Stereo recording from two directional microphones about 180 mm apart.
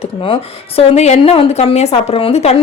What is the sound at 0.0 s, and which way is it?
A woman's voice, 30° left (ahead or behind).